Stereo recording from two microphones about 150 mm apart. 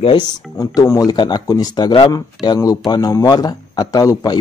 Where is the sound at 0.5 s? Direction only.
20° left (ahead or behind).